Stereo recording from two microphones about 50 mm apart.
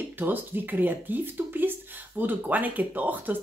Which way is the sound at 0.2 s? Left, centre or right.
Right.